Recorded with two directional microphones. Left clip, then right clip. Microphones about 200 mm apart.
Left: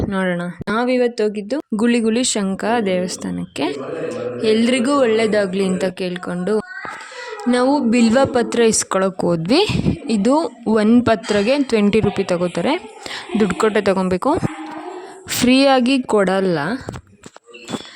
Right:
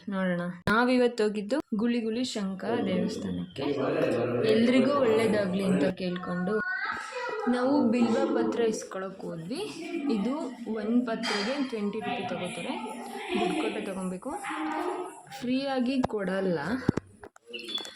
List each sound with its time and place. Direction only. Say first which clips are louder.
0.1 s speech: left 10 dB; 50° left (ahead or behind)
0.8 s speech: left 8 dB; 25° left (ahead or behind)
1.7 s a woman's voice: left 12 dB; 60° left (ahead or behind)
15.4 s a woman's voice: left 16 dB; 55° left (ahead or behind)